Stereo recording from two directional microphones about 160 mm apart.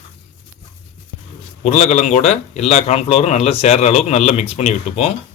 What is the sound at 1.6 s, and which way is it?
A man's voice, 50° left (ahead or behind).